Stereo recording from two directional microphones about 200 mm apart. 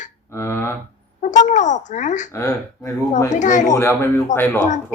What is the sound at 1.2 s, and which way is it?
A child's voice, 40° left (ahead or behind).